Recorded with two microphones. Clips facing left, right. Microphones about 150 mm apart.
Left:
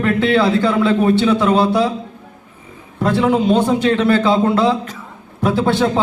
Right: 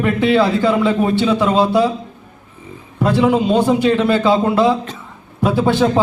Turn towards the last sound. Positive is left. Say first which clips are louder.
# right 1 dB
turn(degrees=-15)  # may be behind; listen again after turning